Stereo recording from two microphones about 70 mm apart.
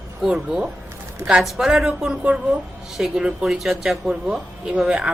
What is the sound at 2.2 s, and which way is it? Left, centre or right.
A woman's voice, centre.